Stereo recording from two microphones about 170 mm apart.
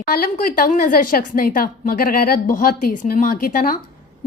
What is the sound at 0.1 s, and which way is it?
A woman's voice, 60° left (ahead or behind).